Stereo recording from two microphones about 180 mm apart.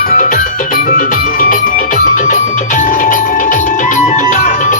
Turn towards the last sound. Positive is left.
turn(degrees=45)  # may be behind; listen again after turning